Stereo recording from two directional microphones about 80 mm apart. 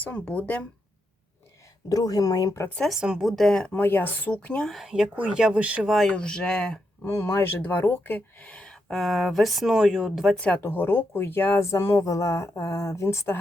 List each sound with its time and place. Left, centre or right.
0.0 s speech: centre
1.9 s speech: left
3.0 s a woman's voice: centre
3.7 s speech: left
4.6 s a woman's voice: centre
5.1 s speech: centre
6.1 s speech: centre
7.0 s speech: left; by 10.3 s centre
10.3 s speech: centre; by 13.3 s left